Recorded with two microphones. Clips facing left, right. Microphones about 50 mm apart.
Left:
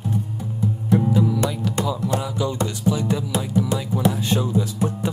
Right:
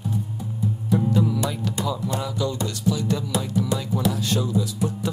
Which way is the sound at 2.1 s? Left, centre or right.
Centre.